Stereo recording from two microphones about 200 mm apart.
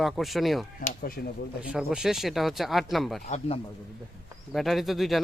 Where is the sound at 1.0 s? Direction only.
50° left (ahead or behind).